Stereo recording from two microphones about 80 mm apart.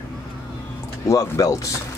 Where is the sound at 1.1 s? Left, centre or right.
Left.